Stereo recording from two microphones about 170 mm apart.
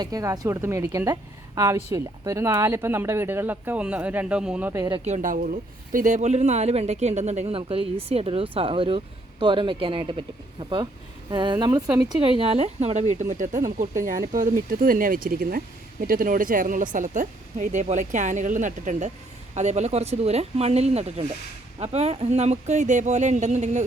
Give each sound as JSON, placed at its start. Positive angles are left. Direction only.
{"t": 0.0, "sound": "a woman's voice", "side_deg": -20}
{"t": 5.0, "sound": "speech", "side_deg": -45}
{"t": 12.2, "sound": "speech", "side_deg": -30}